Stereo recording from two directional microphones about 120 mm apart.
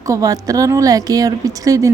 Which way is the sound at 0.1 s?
30° right (ahead or behind).